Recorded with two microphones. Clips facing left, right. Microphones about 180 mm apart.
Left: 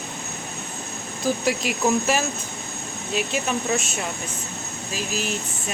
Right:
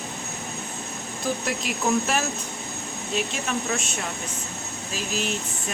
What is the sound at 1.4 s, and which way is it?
Speech, centre (ahead or behind).